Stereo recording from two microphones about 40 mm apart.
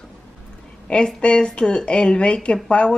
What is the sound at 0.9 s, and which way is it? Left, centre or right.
A woman's voice, left.